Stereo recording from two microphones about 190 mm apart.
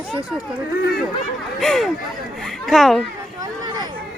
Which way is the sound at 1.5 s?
Centre (ahead or behind).